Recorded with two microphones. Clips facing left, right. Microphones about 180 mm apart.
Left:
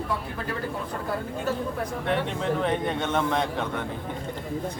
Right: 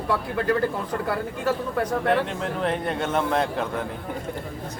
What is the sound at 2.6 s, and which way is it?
A man's voice, 5° right (ahead or behind).